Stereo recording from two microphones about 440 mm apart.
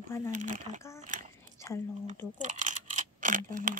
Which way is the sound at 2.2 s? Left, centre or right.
Centre.